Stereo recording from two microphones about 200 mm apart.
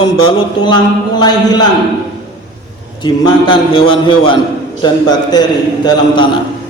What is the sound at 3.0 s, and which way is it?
A man's voice, 20° left (ahead or behind).